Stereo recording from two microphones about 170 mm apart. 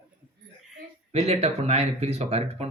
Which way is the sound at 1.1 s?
40° right (ahead or behind).